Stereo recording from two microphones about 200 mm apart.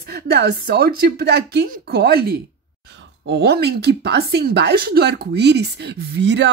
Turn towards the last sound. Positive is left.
turn(degrees=-60)  # may be behind; listen again after turning